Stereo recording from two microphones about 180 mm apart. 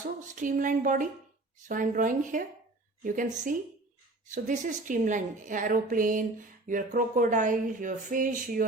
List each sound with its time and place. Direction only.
0.3 s a woman's voice: 45° right (ahead or behind)